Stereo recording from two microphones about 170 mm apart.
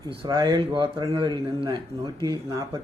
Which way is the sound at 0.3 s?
25° right (ahead or behind).